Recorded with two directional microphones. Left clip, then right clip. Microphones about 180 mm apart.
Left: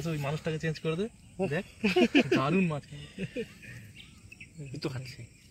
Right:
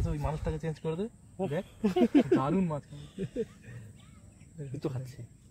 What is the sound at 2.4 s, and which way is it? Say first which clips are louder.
Speech: left 2 dB; 45° left (ahead or behind).